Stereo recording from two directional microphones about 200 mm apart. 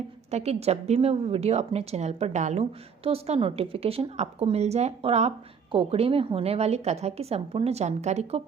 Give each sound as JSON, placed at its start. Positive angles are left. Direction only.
{"t": 0.3, "sound": "a woman's voice", "side_deg": -35}